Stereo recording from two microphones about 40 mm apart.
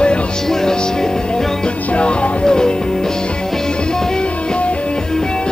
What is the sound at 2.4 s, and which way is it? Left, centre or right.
Music, centre.